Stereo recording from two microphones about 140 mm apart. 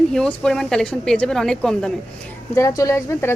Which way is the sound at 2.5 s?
20° left (ahead or behind).